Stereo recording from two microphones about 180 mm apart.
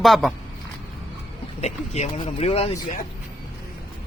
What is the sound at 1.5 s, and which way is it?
Speech, 40° left (ahead or behind).